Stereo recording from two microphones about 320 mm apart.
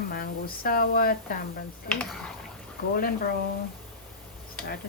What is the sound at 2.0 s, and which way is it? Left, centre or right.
Speech, centre.